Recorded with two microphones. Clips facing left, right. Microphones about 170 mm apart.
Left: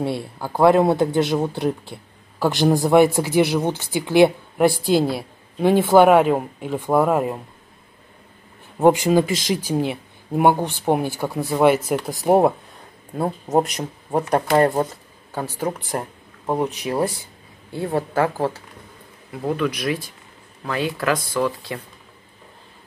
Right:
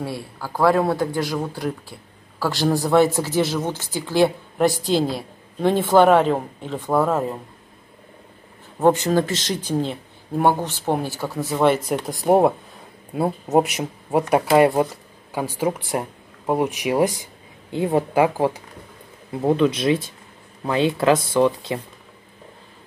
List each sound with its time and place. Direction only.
0.0 s speech: 25° left (ahead or behind)
8.7 s speech: 15° left (ahead or behind); by 18.6 s 15° right (ahead or behind)
19.3 s speech: 25° right (ahead or behind)